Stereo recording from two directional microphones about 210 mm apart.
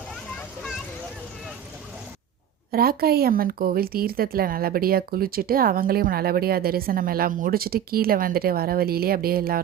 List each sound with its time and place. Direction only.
2.7 s speech: 45° right (ahead or behind)